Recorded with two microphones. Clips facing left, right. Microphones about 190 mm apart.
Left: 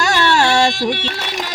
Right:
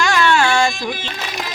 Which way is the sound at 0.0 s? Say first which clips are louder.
Even; 40° left (ahead or behind).